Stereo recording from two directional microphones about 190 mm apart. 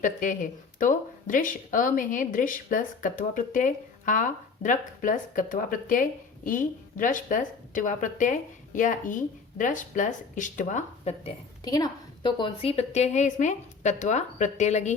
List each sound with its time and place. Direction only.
0.0 s speech: 45° left (ahead or behind)